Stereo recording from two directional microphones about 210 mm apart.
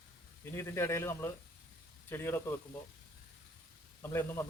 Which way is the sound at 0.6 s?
10° left (ahead or behind).